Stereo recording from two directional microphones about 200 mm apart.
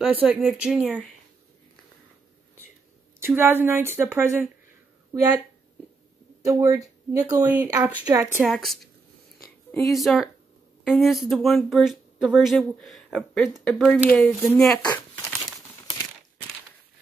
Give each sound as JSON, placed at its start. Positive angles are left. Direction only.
{"t": 0.0, "sound": "speech", "side_deg": -5}
{"t": 3.2, "sound": "speech", "side_deg": -10}
{"t": 6.4, "sound": "speech", "side_deg": -15}
{"t": 7.4, "sound": "speech", "side_deg": -5}
{"t": 8.5, "sound": "speech", "side_deg": 0}
{"t": 9.7, "sound": "a sound", "side_deg": 15}
{"t": 9.9, "sound": "speech", "side_deg": 0}